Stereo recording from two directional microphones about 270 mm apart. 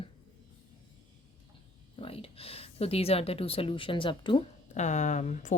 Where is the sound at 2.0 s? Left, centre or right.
Left.